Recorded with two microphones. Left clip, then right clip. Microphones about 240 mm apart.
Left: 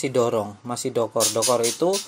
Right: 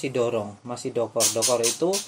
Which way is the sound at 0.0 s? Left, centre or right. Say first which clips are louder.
Left 3 dB; left.